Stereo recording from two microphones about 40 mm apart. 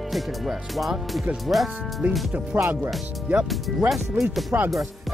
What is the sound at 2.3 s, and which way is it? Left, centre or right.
Speech, right.